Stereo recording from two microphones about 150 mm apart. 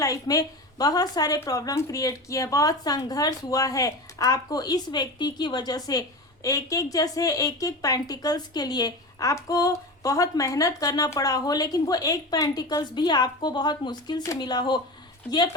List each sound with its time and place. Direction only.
0.0 s a woman's voice: 25° left (ahead or behind)